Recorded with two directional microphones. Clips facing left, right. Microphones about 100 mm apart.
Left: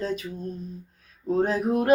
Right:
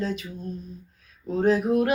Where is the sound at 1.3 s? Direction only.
35° left (ahead or behind).